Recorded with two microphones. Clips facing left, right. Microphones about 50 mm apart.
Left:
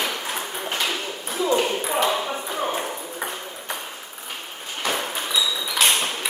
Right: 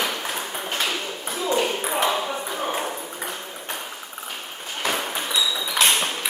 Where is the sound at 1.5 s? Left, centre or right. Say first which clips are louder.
Right 1 dB; centre.